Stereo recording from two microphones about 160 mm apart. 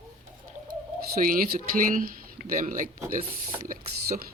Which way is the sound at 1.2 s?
60° right (ahead or behind).